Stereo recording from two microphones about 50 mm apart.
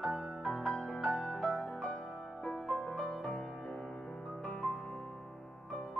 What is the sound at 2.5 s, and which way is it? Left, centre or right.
Music, centre.